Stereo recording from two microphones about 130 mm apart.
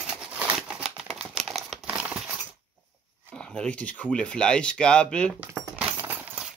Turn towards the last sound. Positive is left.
turn(degrees=-10)  # may be behind; listen again after turning